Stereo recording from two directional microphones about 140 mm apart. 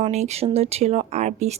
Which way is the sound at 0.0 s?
55° right (ahead or behind).